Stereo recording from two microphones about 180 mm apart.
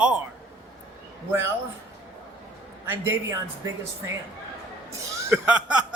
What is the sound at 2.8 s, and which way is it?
Speech, 15° right (ahead or behind).